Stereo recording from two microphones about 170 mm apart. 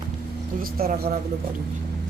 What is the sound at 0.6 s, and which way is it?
Speech, 60° right (ahead or behind).